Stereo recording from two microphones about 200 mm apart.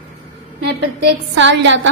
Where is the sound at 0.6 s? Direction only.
60° right (ahead or behind).